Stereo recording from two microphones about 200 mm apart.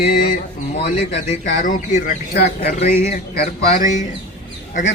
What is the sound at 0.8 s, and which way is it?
Speech, 30° left (ahead or behind).